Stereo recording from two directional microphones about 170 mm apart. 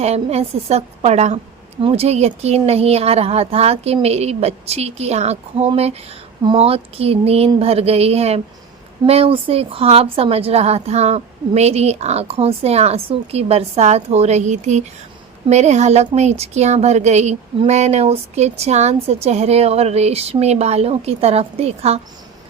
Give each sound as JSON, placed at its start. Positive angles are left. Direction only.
{"t": 0.0, "sound": "a woman's voice", "side_deg": -40}